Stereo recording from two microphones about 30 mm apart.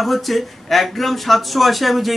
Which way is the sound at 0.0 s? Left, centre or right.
Centre.